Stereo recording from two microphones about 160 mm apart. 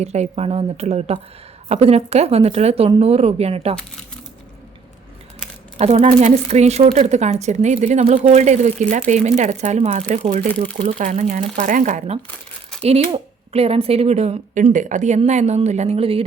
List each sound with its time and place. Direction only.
0.0 s speech: 45° right (ahead or behind)
5.7 s a woman's voice: 40° right (ahead or behind)
12.8 s speech: 35° right (ahead or behind)